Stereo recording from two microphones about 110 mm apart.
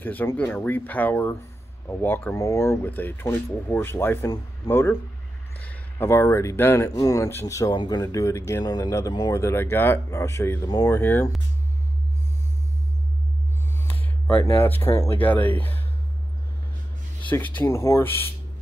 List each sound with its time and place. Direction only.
0.0 s speech: 15° left (ahead or behind); by 9.4 s 35° left (ahead or behind)
9.4 s speech: 20° left (ahead or behind)
10.7 s speech: 35° left (ahead or behind)
11.0 s speech: 15° left (ahead or behind)
13.8 s speech: 20° left (ahead or behind)
15.1 s speech: 15° left (ahead or behind)
17.2 s speech: 15° left (ahead or behind)